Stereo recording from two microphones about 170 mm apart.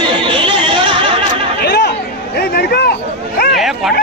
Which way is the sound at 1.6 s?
70° left (ahead or behind).